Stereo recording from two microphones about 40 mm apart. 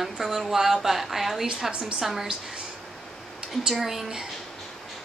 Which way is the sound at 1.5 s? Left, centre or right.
Right.